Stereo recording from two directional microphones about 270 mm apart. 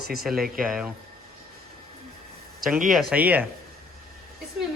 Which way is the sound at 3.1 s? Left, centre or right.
Centre.